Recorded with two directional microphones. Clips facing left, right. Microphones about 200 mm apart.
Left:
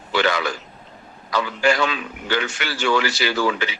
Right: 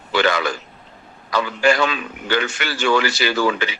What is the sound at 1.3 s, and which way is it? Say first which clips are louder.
A man's voice: right 2 dB; 50° right (ahead or behind).